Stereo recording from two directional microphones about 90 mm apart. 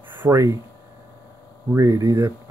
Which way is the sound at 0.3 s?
35° right (ahead or behind).